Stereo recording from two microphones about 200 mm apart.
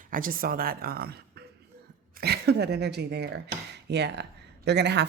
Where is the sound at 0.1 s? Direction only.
45° right (ahead or behind).